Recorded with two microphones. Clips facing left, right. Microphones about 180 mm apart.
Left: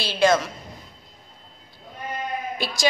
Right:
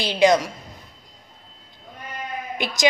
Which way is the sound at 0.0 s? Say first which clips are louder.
Right 2 dB; 15° right (ahead or behind).